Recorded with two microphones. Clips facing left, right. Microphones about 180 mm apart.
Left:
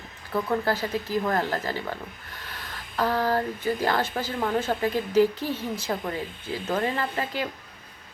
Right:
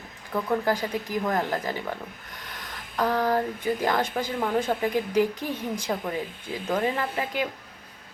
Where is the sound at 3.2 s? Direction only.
15° right (ahead or behind).